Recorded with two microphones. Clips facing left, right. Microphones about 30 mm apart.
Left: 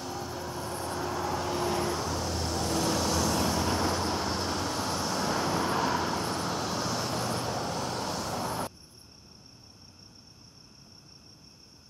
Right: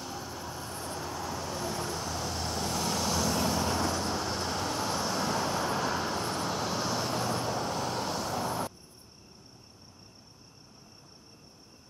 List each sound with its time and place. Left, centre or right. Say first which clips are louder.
0.0 s vehicle: left 3 dB; centre
1.4 s vehicle: left 6 dB; left
1.9 s vehicle: left 3 dB; centre